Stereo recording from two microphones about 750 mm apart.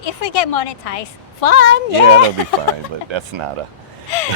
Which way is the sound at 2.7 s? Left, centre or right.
Left.